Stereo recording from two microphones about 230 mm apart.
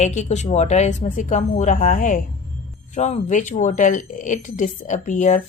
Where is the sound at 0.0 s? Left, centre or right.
Left.